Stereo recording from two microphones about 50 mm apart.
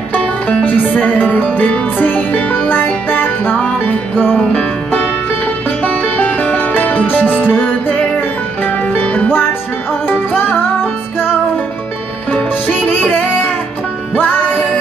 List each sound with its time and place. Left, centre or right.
0.1 s music: left
9.3 s music: left
12.7 s music: left